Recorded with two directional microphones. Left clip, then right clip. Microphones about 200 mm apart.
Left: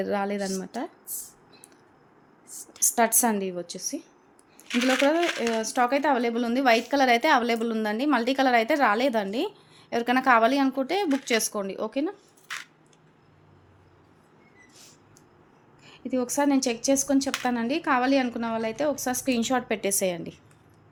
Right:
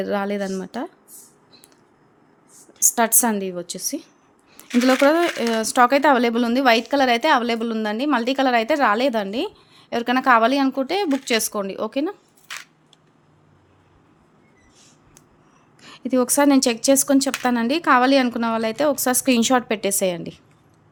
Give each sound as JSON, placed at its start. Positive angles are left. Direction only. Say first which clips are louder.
{"t": 0.0, "sound": "a woman's voice", "louder": "right 4 dB", "side_deg": -25}
{"t": 2.8, "sound": "a woman's voice", "louder": "right 4 dB", "side_deg": -20}
{"t": 12.5, "sound": "a sound", "louder": "right 2 dB", "side_deg": -5}
{"t": 15.8, "sound": "a woman's voice", "louder": "right 8 dB", "side_deg": -40}